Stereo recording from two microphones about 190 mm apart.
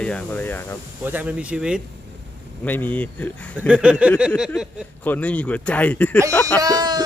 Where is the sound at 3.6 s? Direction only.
5° right (ahead or behind).